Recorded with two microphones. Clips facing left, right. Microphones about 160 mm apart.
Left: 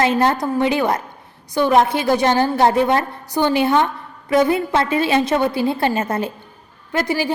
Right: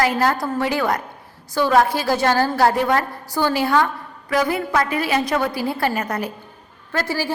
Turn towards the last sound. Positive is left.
turn(degrees=15)  # may be behind; listen again after turning